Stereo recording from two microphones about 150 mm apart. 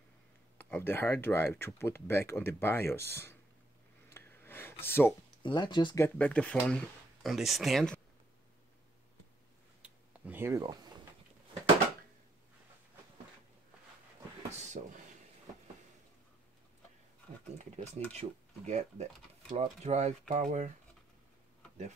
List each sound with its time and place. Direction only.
0.6 s speech: 10° left (ahead or behind)
4.1 s a sound: 15° left (ahead or behind)
5.4 s speech: 30° left (ahead or behind)
5.9 s speech: 15° left (ahead or behind)
9.8 s a sound: 10° right (ahead or behind); by 10.9 s 25° right (ahead or behind)
14.5 s speech: 50° right (ahead or behind)
17.6 s speech: 50° right (ahead or behind)